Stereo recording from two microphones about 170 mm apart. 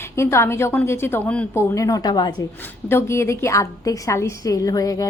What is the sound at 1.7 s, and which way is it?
A woman's voice, 20° left (ahead or behind).